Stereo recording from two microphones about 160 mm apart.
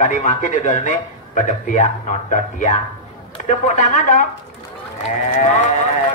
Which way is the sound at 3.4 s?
50° left (ahead or behind).